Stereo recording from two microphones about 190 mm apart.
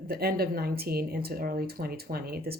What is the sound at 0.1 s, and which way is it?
A woman's voice, 50° right (ahead or behind).